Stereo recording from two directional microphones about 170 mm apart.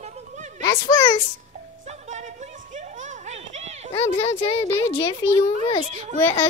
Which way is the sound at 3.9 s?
35° left (ahead or behind).